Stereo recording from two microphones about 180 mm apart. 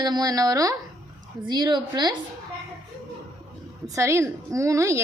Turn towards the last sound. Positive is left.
turn(degrees=-15)  # may be behind; listen again after turning